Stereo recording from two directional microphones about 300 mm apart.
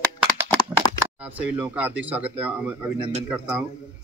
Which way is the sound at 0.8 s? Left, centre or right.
Centre.